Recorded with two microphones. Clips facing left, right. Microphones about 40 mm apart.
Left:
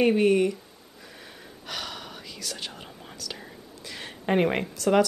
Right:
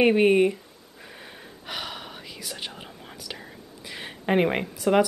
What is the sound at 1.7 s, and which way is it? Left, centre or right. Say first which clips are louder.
Whispering: right 1 dB; centre.